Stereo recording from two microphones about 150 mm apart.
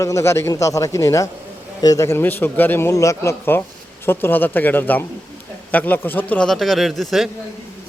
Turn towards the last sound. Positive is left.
turn(degrees=0)  # may be behind; listen again after turning